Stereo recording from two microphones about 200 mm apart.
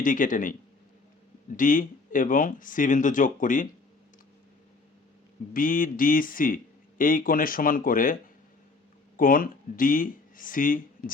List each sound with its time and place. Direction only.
0.0 s speech: 40° left (ahead or behind)
1.5 s speech: 40° left (ahead or behind)
5.5 s speech: 45° left (ahead or behind)